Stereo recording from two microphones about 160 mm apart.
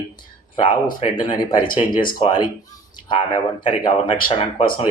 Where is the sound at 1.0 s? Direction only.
30° left (ahead or behind).